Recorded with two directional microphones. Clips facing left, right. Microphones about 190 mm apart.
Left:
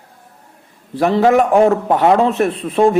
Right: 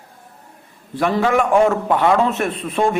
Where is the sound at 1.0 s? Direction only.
35° left (ahead or behind).